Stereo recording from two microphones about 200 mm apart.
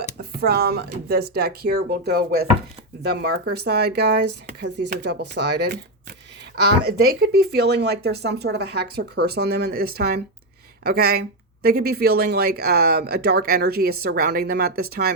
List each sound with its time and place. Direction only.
0.2 s speech: 50° right (ahead or behind)